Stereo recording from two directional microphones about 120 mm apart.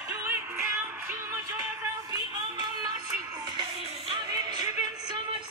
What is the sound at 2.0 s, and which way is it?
Music, 35° right (ahead or behind).